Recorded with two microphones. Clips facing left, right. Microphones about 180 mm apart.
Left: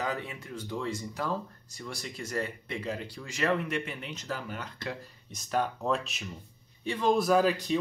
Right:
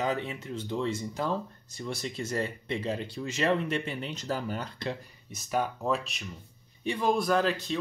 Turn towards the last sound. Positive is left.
turn(degrees=15)  # may be behind; listen again after turning